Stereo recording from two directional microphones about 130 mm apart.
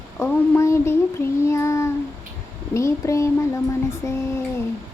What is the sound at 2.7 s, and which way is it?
Speech, 20° left (ahead or behind).